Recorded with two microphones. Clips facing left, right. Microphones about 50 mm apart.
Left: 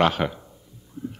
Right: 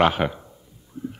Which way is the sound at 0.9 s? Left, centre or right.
Centre.